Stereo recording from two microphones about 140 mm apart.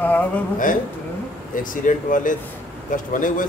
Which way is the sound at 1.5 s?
70° left (ahead or behind).